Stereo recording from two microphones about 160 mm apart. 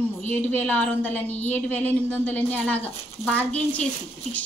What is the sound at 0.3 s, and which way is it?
A woman's voice, 10° left (ahead or behind).